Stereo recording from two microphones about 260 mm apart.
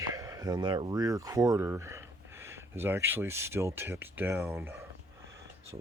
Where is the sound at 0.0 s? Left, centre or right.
Centre.